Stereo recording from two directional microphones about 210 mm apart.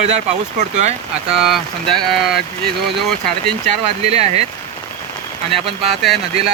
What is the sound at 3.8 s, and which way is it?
Speech, 30° right (ahead or behind).